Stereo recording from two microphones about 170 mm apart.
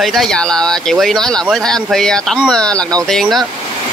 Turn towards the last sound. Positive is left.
turn(degrees=0)  # may be behind; listen again after turning